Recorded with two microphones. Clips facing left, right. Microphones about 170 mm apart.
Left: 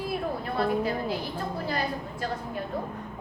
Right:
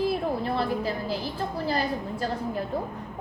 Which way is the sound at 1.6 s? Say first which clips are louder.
Right 5 dB; 35° right (ahead or behind).